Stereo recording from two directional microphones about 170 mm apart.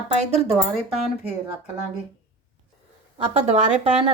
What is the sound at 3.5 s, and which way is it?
Speech, 40° right (ahead or behind).